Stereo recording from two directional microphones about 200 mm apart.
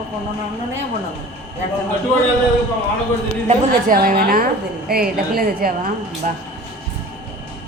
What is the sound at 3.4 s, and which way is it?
A woman's voice, 45° right (ahead or behind).